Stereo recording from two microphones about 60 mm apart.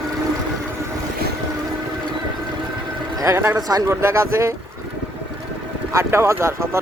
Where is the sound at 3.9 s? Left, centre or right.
Right.